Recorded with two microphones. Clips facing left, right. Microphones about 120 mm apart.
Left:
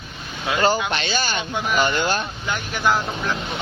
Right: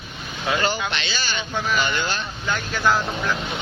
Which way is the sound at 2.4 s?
20° left (ahead or behind).